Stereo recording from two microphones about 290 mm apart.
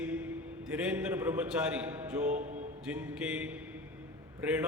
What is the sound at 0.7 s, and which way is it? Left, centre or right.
A man's voice, centre.